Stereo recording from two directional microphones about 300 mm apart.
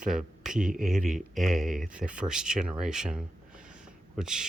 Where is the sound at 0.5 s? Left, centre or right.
Right.